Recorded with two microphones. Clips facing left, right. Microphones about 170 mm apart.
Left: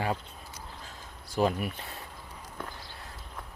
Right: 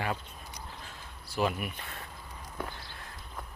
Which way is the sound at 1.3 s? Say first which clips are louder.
Left 3 dB; 35° left (ahead or behind).